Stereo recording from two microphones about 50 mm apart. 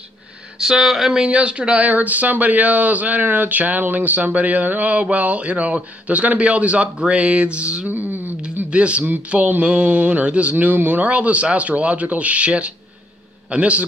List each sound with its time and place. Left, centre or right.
0.6 s speech: centre
1.2 s speech: right
7.9 s a sound: right
8.6 s speech: right